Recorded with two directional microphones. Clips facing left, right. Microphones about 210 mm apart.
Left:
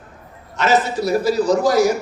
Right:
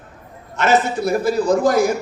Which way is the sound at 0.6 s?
50° right (ahead or behind).